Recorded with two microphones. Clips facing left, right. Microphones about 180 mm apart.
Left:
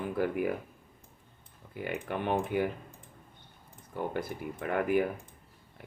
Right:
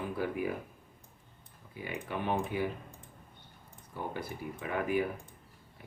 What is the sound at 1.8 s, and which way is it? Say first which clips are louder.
Speech: left 3 dB; 60° left (ahead or behind).